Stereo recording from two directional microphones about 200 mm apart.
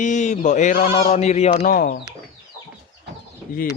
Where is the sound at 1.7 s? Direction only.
45° left (ahead or behind).